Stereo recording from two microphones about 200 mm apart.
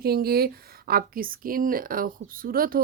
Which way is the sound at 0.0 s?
50° right (ahead or behind).